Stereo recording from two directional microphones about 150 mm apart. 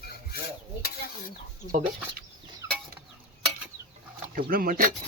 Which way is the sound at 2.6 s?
20° right (ahead or behind).